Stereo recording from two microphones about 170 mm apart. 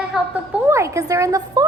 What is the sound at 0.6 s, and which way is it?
A woman's voice, 15° right (ahead or behind).